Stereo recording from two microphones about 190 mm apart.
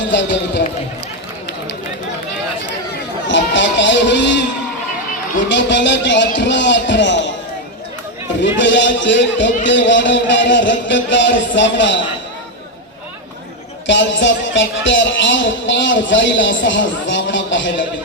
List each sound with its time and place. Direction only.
0.1 s a man's voice: 70° left (ahead or behind)
3.2 s a man's voice: 70° left (ahead or behind)
5.5 s a man's voice: 70° left (ahead or behind)
8.4 s a man's voice: 70° left (ahead or behind)
13.8 s music: 80° left